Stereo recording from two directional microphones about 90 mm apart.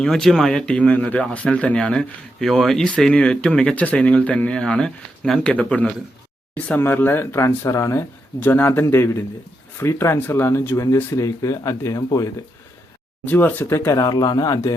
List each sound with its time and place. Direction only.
0.0 s speech: 5° left (ahead or behind); by 8.0 s 35° left (ahead or behind)
8.4 s speech: 20° left (ahead or behind); by 12.0 s 40° left (ahead or behind)
13.2 s speech: 20° left (ahead or behind)
13.9 s speech: 45° left (ahead or behind)